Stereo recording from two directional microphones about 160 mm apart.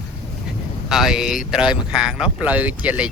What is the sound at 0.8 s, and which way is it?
Speech, 5° right (ahead or behind).